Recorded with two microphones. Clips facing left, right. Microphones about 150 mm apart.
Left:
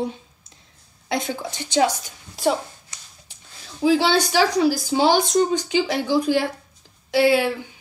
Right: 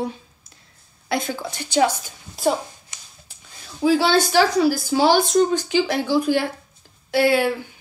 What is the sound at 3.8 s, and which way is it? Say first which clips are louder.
A woman's voice: right 1 dB; 15° left (ahead or behind).